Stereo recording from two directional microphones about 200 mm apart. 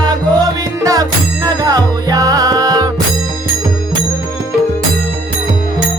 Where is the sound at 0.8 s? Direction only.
15° right (ahead or behind).